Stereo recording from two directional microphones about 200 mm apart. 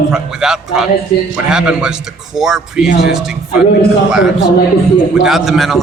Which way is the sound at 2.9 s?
50° left (ahead or behind).